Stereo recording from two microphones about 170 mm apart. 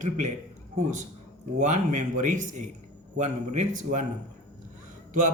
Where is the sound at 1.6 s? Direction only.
45° right (ahead or behind).